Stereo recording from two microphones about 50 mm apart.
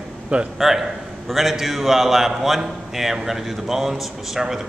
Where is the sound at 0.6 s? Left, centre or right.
Centre.